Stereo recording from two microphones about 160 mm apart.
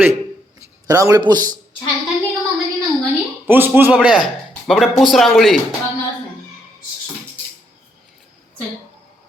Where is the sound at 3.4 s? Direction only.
10° right (ahead or behind).